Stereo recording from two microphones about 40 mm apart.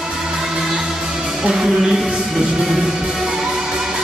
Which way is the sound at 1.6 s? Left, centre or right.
Centre.